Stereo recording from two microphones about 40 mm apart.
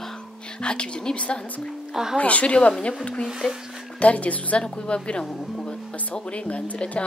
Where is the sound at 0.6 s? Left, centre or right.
Left.